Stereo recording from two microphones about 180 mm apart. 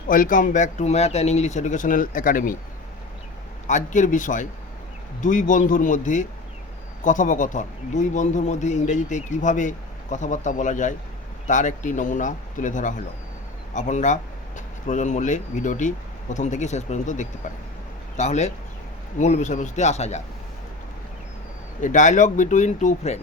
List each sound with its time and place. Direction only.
0.1 s speech: 50° left (ahead or behind)
3.7 s speech: 45° left (ahead or behind)
21.8 s speech: 45° left (ahead or behind)